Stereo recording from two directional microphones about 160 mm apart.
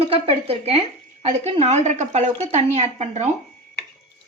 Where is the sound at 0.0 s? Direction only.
35° right (ahead or behind).